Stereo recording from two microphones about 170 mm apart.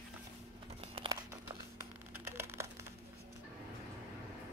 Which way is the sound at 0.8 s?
35° right (ahead or behind).